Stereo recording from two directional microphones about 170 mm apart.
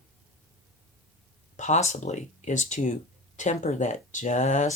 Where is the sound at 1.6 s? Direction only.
45° left (ahead or behind).